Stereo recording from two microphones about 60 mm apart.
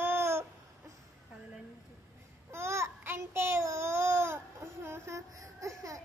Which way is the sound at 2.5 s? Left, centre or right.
Right.